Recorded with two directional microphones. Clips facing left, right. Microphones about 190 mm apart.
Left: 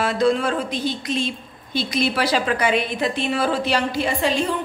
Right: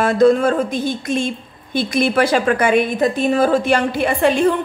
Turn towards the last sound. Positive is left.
turn(degrees=-55)  # may be behind; listen again after turning